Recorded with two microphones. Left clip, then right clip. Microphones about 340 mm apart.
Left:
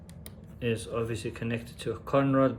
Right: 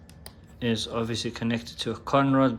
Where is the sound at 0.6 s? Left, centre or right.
Centre.